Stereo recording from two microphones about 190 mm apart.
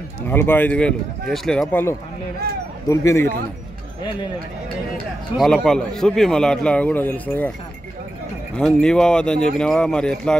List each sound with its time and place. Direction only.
0.3 s speech: 10° left (ahead or behind)
5.4 s a man's voice: centre (ahead or behind)
8.5 s a man's voice: 5° left (ahead or behind)